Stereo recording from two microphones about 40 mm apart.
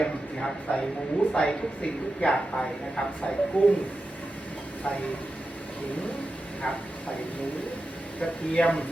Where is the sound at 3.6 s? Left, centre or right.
Left.